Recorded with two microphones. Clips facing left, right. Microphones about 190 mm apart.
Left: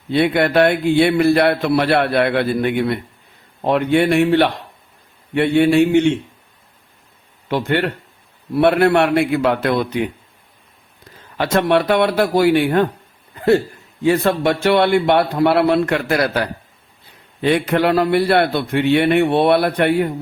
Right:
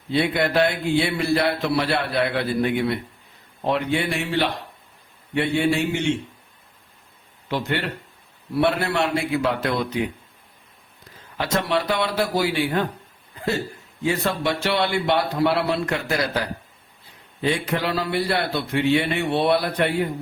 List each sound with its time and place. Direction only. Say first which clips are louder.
0.1 s a man's voice: left 6 dB; 60° left (ahead or behind)
7.4 s a man's voice: left 7 dB; 60° left (ahead or behind)
11.3 s a man's voice: left 7 dB; 60° left (ahead or behind)
14.0 s a man's voice: left 7 dB; 55° left (ahead or behind)